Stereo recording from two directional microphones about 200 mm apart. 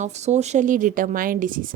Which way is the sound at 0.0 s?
35° right (ahead or behind).